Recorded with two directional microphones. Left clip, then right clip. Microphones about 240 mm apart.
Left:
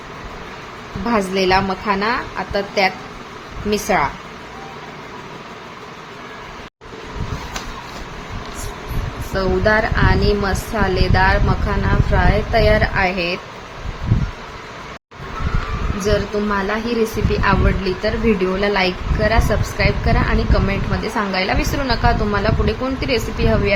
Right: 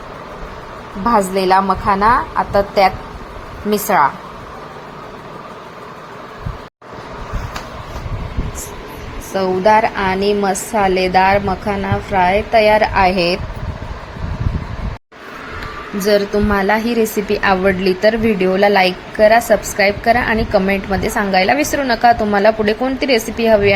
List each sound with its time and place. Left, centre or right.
1.0 s a woman's voice: centre
9.3 s a woman's voice: centre
16.0 s a woman's voice: right